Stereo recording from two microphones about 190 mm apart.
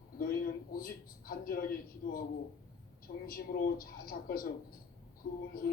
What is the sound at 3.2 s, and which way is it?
Speech, 50° left (ahead or behind).